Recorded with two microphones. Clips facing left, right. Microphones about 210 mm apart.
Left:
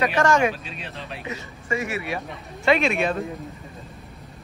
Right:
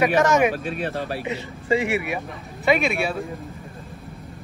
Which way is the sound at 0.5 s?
65° right (ahead or behind).